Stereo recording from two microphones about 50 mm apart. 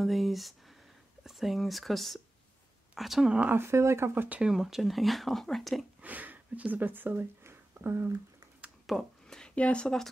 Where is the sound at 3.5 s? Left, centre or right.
Right.